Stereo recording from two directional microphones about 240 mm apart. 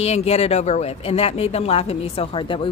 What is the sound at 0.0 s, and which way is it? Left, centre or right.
Speech, left.